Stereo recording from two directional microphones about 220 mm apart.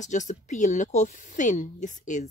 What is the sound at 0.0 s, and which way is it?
Speech, 35° left (ahead or behind).